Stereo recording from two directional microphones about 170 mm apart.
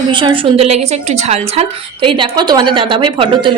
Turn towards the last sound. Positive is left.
turn(degrees=-30)  # may be behind; listen again after turning